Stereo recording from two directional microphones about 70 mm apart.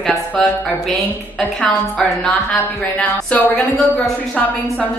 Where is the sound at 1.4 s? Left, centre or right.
Centre.